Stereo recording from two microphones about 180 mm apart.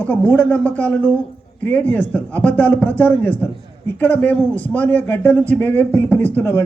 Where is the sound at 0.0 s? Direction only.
5° left (ahead or behind).